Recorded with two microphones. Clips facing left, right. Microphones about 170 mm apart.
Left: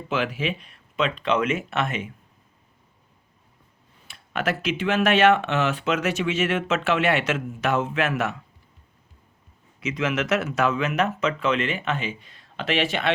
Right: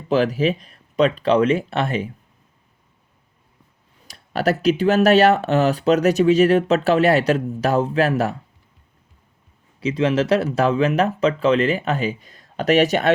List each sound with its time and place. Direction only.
0.1 s speech: 40° right (ahead or behind)
4.0 s speech: 35° right (ahead or behind)
9.8 s speech: 30° right (ahead or behind)